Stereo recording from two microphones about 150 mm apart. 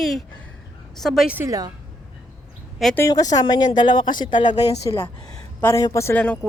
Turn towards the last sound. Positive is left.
turn(degrees=10)  # may be behind; listen again after turning